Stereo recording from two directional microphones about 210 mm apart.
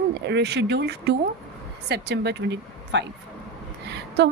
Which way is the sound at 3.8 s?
55° right (ahead or behind).